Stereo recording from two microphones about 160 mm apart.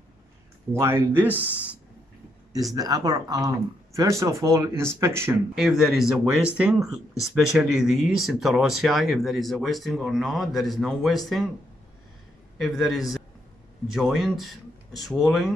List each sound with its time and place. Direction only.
0.7 s speech: 15° right (ahead or behind)
2.7 s speech: 25° right (ahead or behind)
5.5 s speech: centre (ahead or behind)
12.5 s speech: centre (ahead or behind)